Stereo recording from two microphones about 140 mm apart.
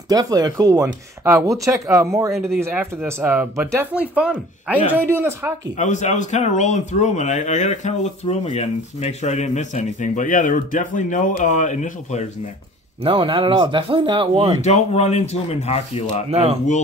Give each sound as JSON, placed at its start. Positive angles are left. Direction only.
{"t": 0.1, "sound": "speech", "side_deg": -25}
{"t": 2.3, "sound": "speech", "side_deg": 0}
{"t": 2.6, "sound": "speech", "side_deg": -15}
{"t": 5.8, "sound": "speech", "side_deg": 60}
{"t": 13.0, "sound": "speech", "side_deg": -40}
{"t": 14.6, "sound": "speech", "side_deg": 50}
{"t": 16.3, "sound": "speech", "side_deg": -45}